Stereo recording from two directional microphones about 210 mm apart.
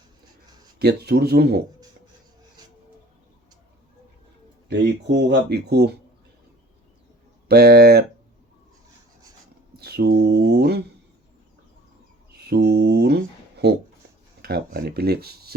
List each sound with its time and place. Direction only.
0.8 s speech: 50° right (ahead or behind)
4.7 s speech: 55° right (ahead or behind)
7.4 s speech: 50° right (ahead or behind)
9.7 s speech: 50° right (ahead or behind)
12.3 s speech: 50° right (ahead or behind)